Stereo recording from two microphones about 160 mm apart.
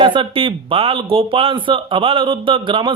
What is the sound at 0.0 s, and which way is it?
A man's voice, 35° right (ahead or behind).